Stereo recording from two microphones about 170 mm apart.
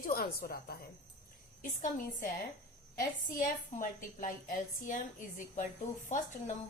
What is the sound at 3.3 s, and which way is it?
A woman's voice, 50° left (ahead or behind).